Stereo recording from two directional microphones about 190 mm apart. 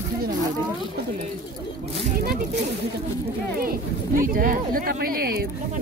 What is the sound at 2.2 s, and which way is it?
Speech, 55° right (ahead or behind).